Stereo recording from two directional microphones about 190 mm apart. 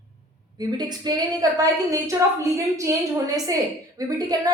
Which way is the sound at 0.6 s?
20° right (ahead or behind).